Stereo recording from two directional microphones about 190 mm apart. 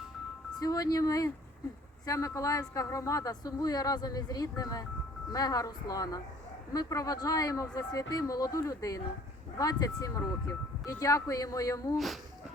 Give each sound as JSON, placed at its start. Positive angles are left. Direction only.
{"t": 0.6, "sound": "a woman's voice", "side_deg": 20}
{"t": 11.9, "sound": "speech", "side_deg": 0}